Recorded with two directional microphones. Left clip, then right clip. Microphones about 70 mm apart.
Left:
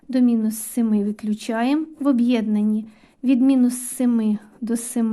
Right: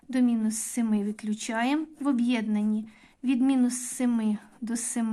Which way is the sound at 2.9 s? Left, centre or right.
Left.